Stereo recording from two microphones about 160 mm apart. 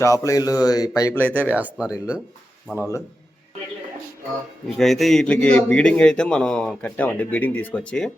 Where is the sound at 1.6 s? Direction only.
10° right (ahead or behind).